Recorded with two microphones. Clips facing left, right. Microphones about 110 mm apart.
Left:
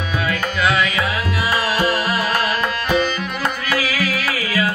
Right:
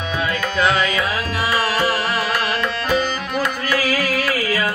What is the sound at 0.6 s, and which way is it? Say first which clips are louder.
Music: right 1 dB; 35° right (ahead or behind).